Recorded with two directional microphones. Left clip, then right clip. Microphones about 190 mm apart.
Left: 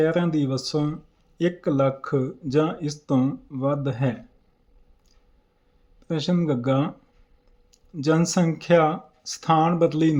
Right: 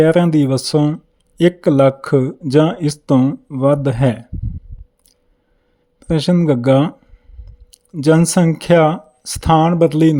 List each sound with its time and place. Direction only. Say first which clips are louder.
0.0 s speech: right 10 dB; 45° right (ahead or behind)
6.0 s speech: right 9 dB; 45° right (ahead or behind)